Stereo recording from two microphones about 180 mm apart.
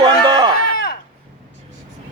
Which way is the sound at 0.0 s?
25° right (ahead or behind).